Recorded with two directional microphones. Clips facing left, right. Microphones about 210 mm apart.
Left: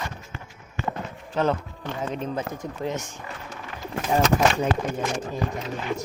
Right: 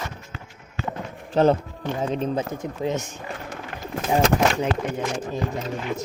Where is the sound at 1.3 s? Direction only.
30° right (ahead or behind).